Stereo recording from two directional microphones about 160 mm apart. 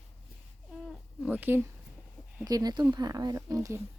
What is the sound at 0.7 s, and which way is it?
Cat, 5° right (ahead or behind).